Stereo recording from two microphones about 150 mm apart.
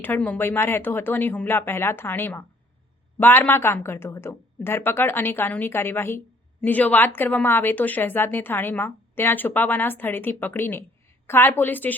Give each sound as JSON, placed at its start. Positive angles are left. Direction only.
{"t": 0.0, "sound": "a woman's voice", "side_deg": 10}